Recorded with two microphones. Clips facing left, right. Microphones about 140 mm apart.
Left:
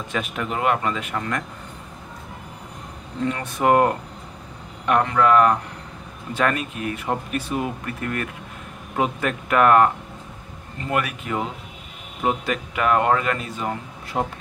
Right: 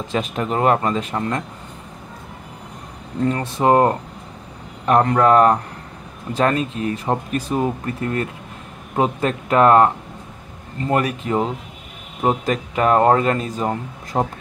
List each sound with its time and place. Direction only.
0.1 s speech: 35° right (ahead or behind)
3.3 s speech: 30° right (ahead or behind)
10.9 s speech: 35° right (ahead or behind)